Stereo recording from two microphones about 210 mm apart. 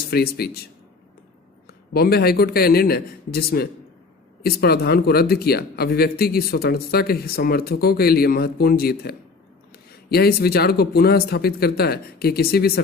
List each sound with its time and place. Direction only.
0.1 s a man's voice: 50° left (ahead or behind)